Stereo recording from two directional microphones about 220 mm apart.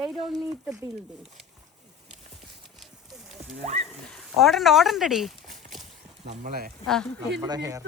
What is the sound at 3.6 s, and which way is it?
Speech, 30° right (ahead or behind).